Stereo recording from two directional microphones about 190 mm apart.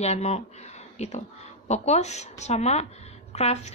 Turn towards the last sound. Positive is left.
turn(degrees=35)  # may be behind; listen again after turning